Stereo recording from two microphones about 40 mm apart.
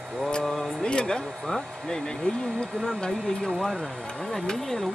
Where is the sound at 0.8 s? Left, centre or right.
Left.